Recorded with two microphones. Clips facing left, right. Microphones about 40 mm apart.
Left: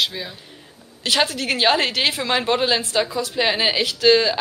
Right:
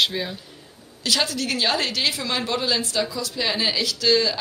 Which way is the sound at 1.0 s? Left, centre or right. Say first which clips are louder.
Left 3 dB; left.